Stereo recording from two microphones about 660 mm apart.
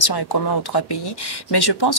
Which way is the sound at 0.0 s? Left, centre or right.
Left.